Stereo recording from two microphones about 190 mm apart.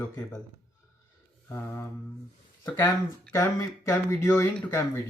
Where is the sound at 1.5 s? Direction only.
10° left (ahead or behind).